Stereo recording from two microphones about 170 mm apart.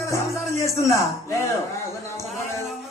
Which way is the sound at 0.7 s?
15° left (ahead or behind).